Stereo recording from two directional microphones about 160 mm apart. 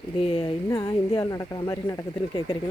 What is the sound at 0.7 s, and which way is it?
Speech, 15° left (ahead or behind).